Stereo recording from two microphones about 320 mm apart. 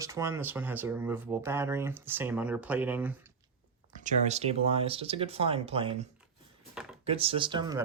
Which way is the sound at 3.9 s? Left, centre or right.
Right.